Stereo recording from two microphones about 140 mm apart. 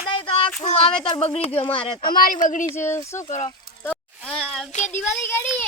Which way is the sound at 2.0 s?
85° left.